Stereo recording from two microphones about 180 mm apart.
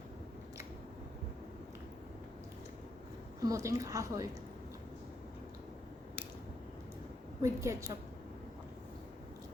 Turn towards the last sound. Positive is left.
turn(degrees=-15)  # may be behind; listen again after turning